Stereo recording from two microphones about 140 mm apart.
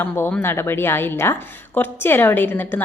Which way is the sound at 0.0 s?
15° left (ahead or behind).